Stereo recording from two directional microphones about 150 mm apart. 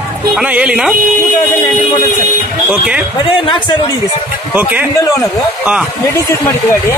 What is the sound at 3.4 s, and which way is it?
Speech, 30° left (ahead or behind).